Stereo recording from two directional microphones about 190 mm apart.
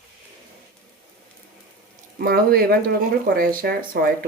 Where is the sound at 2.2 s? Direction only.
55° right (ahead or behind).